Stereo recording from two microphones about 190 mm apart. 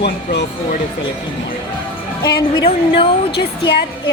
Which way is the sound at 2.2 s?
30° left (ahead or behind).